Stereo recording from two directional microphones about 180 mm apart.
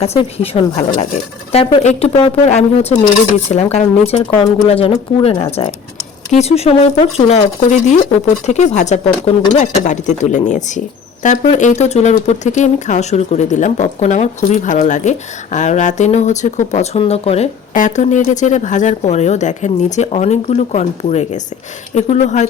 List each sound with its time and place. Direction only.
0.0 s speech: 35° left (ahead or behind)